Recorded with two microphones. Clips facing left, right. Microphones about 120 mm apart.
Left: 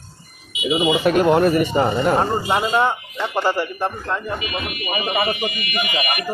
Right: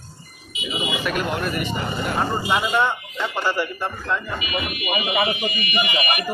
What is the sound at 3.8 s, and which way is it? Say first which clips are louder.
Speech: left 2 dB; 25° left (ahead or behind).